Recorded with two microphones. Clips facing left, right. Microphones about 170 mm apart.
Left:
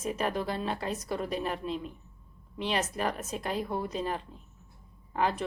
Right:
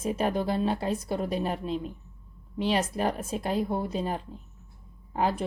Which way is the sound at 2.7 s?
35° right (ahead or behind).